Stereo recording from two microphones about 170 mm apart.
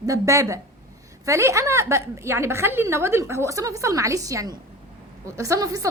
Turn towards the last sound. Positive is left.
turn(degrees=-20)  # may be behind; listen again after turning